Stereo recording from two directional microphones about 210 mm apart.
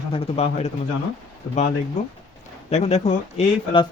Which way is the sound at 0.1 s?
30° left (ahead or behind).